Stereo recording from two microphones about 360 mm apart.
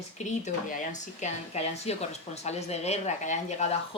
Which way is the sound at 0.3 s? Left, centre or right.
Left.